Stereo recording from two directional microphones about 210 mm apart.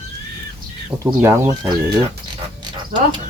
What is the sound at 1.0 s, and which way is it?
Speech, 15° right (ahead or behind).